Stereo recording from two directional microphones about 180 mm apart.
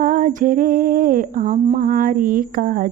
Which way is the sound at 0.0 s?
50° right (ahead or behind).